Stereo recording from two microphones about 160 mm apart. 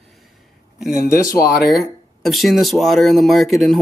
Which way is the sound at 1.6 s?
Centre (ahead or behind).